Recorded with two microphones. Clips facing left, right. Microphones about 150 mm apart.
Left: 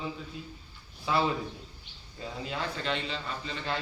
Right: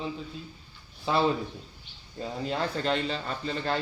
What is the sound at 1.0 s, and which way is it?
Speech, 25° right (ahead or behind).